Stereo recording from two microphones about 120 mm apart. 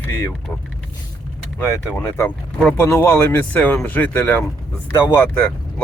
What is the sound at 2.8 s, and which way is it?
Speech, 20° left (ahead or behind).